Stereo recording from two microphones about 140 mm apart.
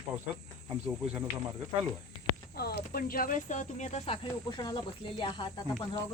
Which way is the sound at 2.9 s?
90° left.